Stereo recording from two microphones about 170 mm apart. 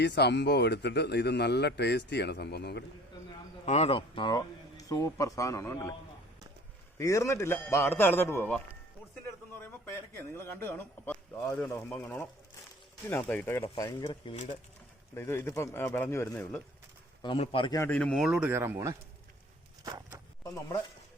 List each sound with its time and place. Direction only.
0.0 s a man's voice: 80° left
3.7 s speech: 35° left (ahead or behind); by 5.9 s 15° left (ahead or behind)
7.0 s a man's voice: 15° left (ahead or behind)
13.8 s speech: 25° left (ahead or behind)
15.1 s a man's voice: 15° left (ahead or behind)
17.2 s speech: 30° left (ahead or behind)
17.7 s a man's voice: 15° left (ahead or behind)
17.9 s speech: 5° left (ahead or behind); by 20.1 s 20° right (ahead or behind)